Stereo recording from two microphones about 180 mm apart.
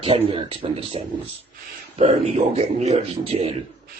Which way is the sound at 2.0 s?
40° right (ahead or behind).